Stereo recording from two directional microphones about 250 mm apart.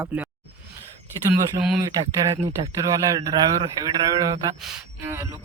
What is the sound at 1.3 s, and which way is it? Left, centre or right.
Speech, centre.